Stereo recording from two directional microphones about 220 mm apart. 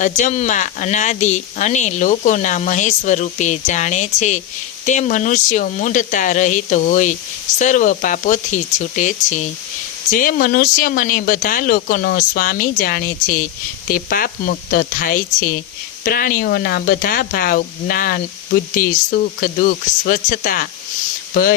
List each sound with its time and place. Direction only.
0.0 s speech: 35° left (ahead or behind)